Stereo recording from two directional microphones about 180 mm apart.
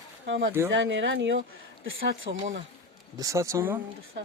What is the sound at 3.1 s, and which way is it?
Speech, 15° right (ahead or behind).